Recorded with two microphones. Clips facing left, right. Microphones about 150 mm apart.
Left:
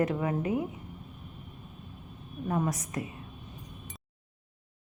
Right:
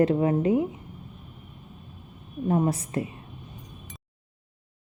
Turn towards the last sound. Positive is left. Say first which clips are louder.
# right 6 dB
turn(degrees=-30)  # may be behind; listen again after turning